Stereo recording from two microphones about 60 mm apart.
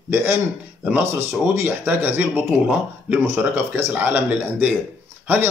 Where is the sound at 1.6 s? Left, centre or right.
Right.